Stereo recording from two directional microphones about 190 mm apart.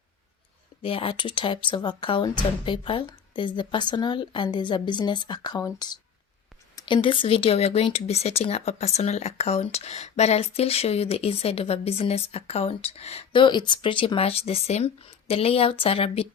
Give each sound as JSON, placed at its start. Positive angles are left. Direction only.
{"t": 0.8, "sound": "speech", "side_deg": 30}